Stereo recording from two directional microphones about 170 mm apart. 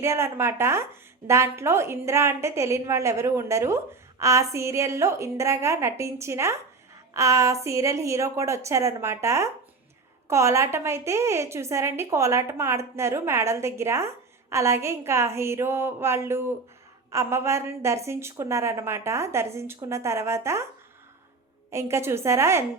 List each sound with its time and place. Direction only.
0.0 s a woman's voice: 15° right (ahead or behind)
21.7 s a woman's voice: 15° right (ahead or behind)